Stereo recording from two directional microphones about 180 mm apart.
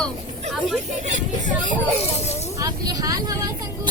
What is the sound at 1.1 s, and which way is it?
Speech, 45° right (ahead or behind).